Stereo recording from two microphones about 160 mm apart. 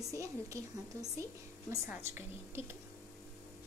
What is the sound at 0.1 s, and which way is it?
A woman's voice, 20° right (ahead or behind).